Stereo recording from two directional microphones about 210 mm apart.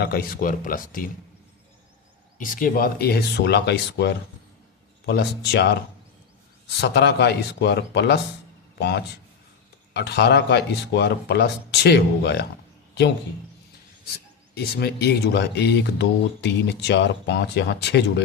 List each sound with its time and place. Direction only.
0.0 s speech: 45° left (ahead or behind)
2.4 s speech: 40° left (ahead or behind)
14.5 s speech: 50° left (ahead or behind)